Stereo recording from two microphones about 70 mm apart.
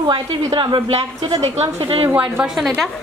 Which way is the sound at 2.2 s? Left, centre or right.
Centre.